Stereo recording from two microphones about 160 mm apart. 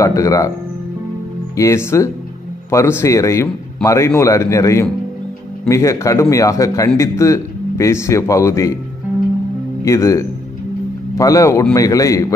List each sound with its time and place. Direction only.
0.0 s a man's voice: 20° left (ahead or behind)
1.6 s a man's voice: 15° left (ahead or behind)
9.8 s a man's voice: 20° left (ahead or behind)